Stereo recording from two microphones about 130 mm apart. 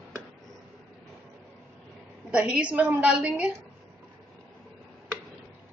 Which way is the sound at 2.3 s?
10° right (ahead or behind).